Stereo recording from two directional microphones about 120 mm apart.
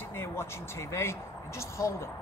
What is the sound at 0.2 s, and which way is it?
Speech, 20° left (ahead or behind).